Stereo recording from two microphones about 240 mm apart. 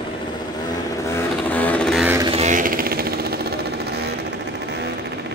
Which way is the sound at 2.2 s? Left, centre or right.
Right.